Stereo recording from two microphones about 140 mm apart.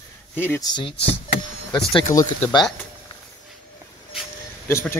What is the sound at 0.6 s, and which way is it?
Speech, 35° left (ahead or behind).